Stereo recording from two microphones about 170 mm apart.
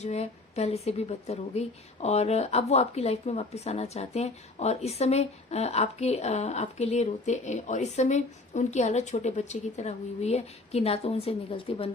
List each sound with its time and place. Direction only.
0.0 s a woman's voice: 40° left (ahead or behind)